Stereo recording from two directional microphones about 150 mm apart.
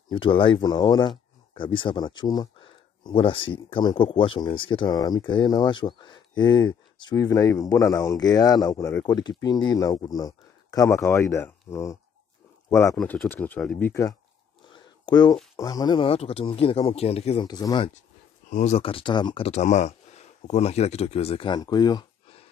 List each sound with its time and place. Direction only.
0.1 s speech: 35° left (ahead or behind); by 12.9 s 20° left (ahead or behind)
12.9 s speech: 5° left (ahead or behind)
14.7 s a sound: 30° left (ahead or behind)
15.5 s speech: 25° left (ahead or behind); by 17.5 s 40° left (ahead or behind)
17.5 s speech: 25° left (ahead or behind)
18.5 s speech: 55° left (ahead or behind)
18.8 s speech: 35° left (ahead or behind)